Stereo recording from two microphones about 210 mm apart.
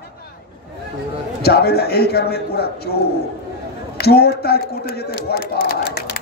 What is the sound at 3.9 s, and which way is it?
A man's voice, 50° left (ahead or behind).